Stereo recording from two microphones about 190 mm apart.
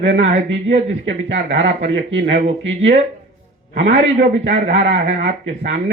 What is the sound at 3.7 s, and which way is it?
Speech, 70° right (ahead or behind).